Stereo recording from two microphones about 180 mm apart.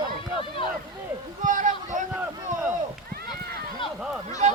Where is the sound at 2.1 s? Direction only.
10° right (ahead or behind).